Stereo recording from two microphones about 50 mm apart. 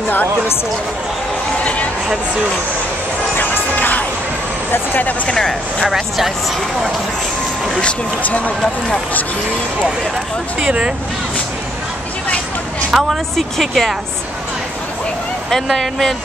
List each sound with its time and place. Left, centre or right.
1.6 s a sound: left
3.3 s music: left
4.7 s speech: left
5.3 s speech: centre
5.9 s speech: centre
8.2 s speech: left
12.9 s a woman's voice: centre
13.4 s speech: centre
15.5 s speech: centre